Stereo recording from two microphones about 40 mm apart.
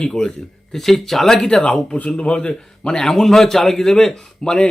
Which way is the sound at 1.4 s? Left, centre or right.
Left.